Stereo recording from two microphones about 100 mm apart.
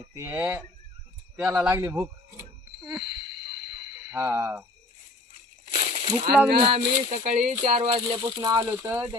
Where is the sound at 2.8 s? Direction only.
5° right (ahead or behind).